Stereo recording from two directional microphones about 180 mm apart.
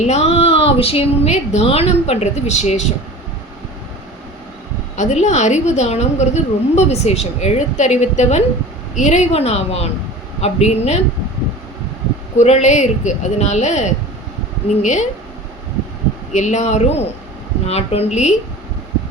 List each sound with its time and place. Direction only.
0.0 s a woman's voice: 35° left (ahead or behind)
4.9 s a woman's voice: 40° left (ahead or behind)
12.4 s a woman's voice: 40° left (ahead or behind)
16.3 s a woman's voice: 40° left (ahead or behind)